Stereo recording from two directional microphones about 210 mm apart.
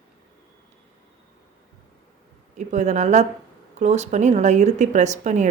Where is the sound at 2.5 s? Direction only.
35° right (ahead or behind).